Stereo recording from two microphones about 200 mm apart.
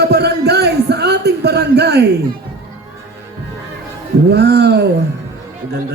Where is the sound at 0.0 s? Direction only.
55° right (ahead or behind).